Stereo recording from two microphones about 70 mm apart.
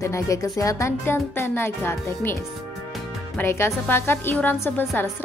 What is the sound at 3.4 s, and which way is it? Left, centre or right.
Speech, left.